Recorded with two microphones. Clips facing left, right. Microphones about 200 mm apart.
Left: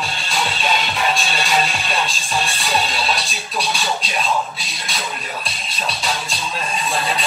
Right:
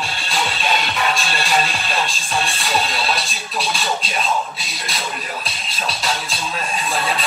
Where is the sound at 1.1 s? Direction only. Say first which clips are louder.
Even; centre (ahead or behind).